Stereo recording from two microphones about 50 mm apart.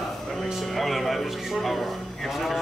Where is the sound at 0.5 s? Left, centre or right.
Centre.